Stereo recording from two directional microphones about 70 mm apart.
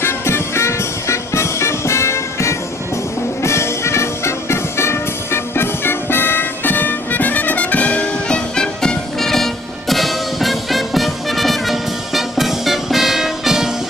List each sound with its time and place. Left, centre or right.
0.0 s music: left; by 13.7 s centre